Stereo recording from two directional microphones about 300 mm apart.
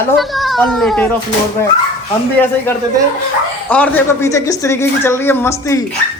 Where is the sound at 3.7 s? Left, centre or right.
Centre.